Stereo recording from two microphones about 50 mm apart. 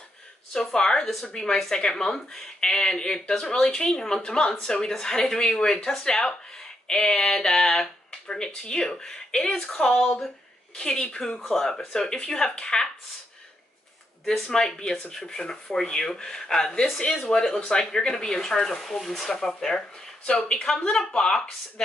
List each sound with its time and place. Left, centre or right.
0.7 s speech: centre
14.2 s speech: centre